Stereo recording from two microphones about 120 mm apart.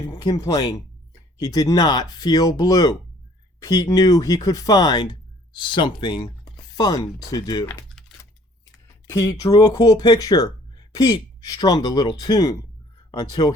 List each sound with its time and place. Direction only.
0.1 s speech: 30° left (ahead or behind)
9.0 s speech: 25° left (ahead or behind)